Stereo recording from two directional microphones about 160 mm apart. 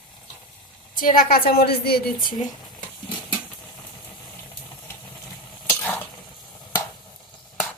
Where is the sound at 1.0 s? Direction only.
60° left (ahead or behind).